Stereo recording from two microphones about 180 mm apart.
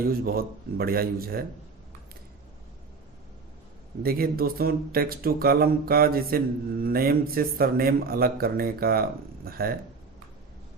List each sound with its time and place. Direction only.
0.0 s speech: 55° right (ahead or behind)
4.0 s speech: 55° right (ahead or behind)